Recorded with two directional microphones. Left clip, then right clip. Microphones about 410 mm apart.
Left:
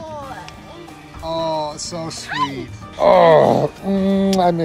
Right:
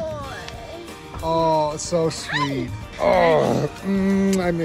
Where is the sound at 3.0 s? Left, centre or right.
Left.